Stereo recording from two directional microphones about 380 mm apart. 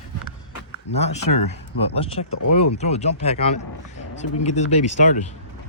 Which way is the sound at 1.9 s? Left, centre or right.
Centre.